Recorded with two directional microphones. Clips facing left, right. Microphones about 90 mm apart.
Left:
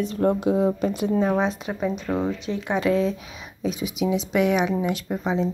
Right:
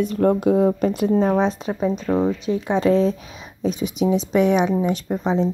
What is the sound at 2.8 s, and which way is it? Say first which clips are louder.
Speech: right 4 dB; 35° right (ahead or behind).